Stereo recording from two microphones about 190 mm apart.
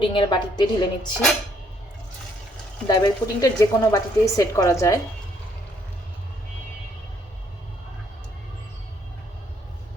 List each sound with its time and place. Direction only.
0.0 s a woman's voice: 25° left (ahead or behind)
2.8 s a woman's voice: 20° left (ahead or behind)